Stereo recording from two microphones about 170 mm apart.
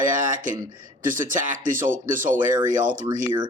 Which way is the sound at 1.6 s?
50° right (ahead or behind).